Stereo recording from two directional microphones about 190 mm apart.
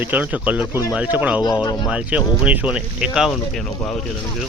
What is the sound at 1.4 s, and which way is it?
Speech, 20° left (ahead or behind).